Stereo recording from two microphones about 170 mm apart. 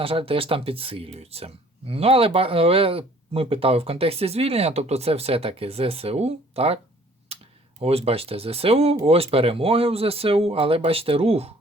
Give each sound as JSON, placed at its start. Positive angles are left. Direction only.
{"t": 0.0, "sound": "speech", "side_deg": -35}
{"t": 7.8, "sound": "speech", "side_deg": -35}